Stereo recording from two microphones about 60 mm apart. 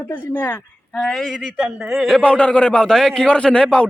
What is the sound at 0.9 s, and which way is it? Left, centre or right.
A man's voice, centre.